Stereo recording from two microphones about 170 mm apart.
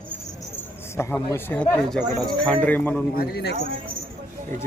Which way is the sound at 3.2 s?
70° left (ahead or behind).